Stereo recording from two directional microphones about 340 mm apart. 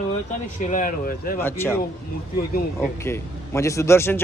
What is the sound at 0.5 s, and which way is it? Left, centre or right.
Speech, left.